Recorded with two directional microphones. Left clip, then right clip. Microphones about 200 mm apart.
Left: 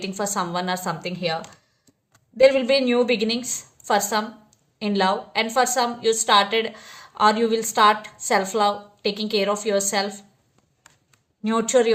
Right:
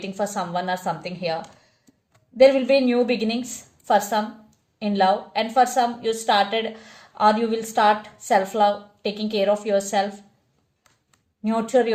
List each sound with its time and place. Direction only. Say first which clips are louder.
0.0 s a woman's voice: left 1 dB; 40° left (ahead or behind)
2.4 s a woman's voice: right 1 dB; 40° left (ahead or behind)
11.4 s a woman's voice: left 1 dB; 40° left (ahead or behind)